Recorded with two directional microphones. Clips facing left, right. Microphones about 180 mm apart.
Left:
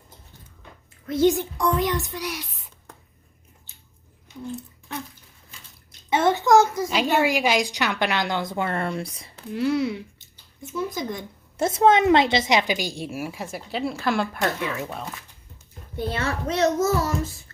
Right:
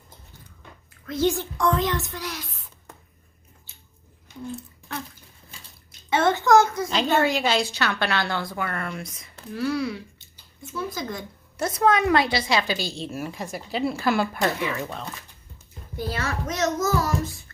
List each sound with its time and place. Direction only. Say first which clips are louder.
1.0 s a woman's voice: left 4 dB; 20° left (ahead or behind)
6.1 s a sound: left 1 dB; 15° left (ahead or behind)
6.8 s a woman's voice: even; 10° left (ahead or behind)
16.0 s a child's voice: left 2 dB; 30° left (ahead or behind)